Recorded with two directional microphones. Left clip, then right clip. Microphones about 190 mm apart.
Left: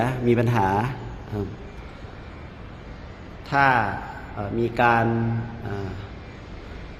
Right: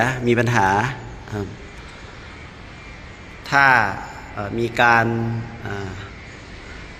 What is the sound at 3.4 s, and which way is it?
A man's voice, 5° right (ahead or behind).